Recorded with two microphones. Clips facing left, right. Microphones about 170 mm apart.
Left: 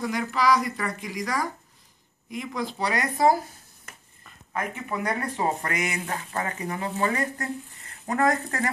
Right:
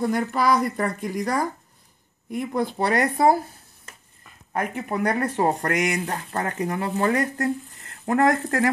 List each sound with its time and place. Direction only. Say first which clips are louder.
0.0 s speech: right 3 dB; 45° right (ahead or behind)
2.2 s speech: right 6 dB; 55° right (ahead or behind)
4.5 s speech: right 4 dB; 40° right (ahead or behind)
8.0 s speech: right 4 dB; 55° right (ahead or behind)